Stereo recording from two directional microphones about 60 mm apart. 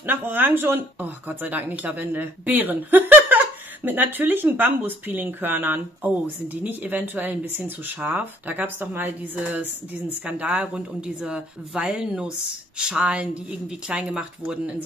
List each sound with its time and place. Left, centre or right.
0.0 s speech: right; by 14.8 s centre